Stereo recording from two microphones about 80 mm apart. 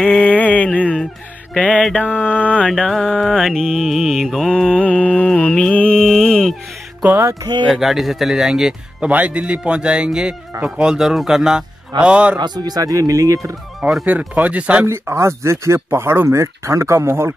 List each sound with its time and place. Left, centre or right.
0.0 s a sound: centre
1.5 s music: centre
2.2 s speech: centre
2.7 s mantra: centre
7.6 s mantra: centre
9.1 s a man's voice: centre
12.4 s speech: right
13.7 s speech: centre
14.0 s a man's voice: right
14.9 s speech: right